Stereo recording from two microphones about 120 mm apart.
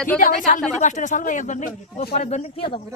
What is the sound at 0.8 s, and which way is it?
Speech, 85° left.